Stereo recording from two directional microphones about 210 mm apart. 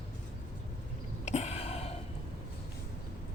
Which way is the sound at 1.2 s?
30° left (ahead or behind).